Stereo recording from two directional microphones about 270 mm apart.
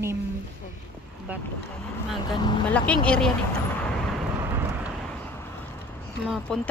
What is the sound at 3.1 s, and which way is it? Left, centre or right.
Speech, centre.